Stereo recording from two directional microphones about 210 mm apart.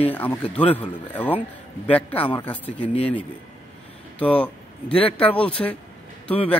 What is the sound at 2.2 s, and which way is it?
Speech, 25° left (ahead or behind).